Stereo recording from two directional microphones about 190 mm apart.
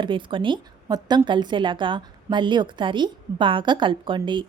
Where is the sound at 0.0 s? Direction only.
25° right (ahead or behind).